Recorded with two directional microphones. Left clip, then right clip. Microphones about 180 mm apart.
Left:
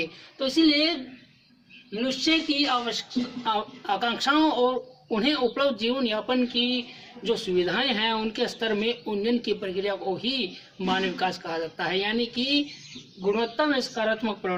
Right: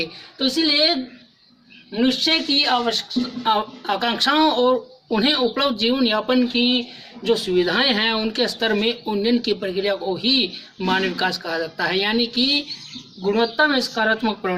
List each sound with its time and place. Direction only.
0.0 s speech: 15° left (ahead or behind)
2.0 s speech: 15° left (ahead or behind)